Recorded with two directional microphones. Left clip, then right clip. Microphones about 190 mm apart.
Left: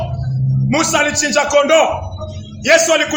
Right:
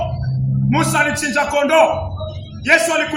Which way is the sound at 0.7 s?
25° left (ahead or behind).